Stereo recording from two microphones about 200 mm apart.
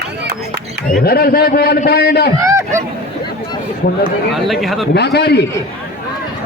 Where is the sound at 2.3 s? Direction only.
15° right (ahead or behind).